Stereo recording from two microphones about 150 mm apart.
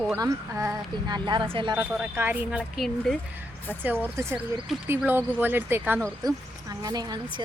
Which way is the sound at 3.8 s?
15° right (ahead or behind).